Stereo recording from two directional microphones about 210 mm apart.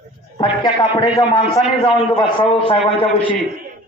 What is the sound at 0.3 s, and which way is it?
A man's voice, 20° left (ahead or behind).